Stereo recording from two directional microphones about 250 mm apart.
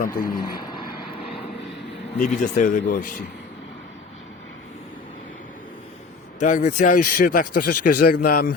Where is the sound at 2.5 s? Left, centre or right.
Left.